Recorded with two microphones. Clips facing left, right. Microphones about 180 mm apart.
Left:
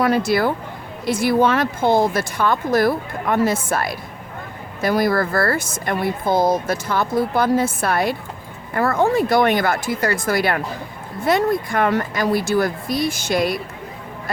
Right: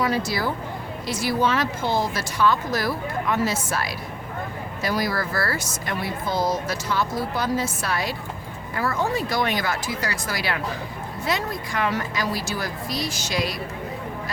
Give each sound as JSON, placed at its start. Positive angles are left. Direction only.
{"t": 0.3, "sound": "speech", "side_deg": 60}